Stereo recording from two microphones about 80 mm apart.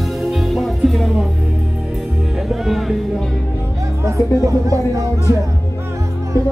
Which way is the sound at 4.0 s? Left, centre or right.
Right.